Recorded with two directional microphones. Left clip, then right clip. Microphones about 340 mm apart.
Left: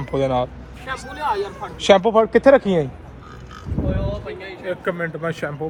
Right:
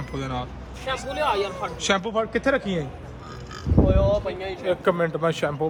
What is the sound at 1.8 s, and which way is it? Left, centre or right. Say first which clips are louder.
Speech: left 10 dB; centre.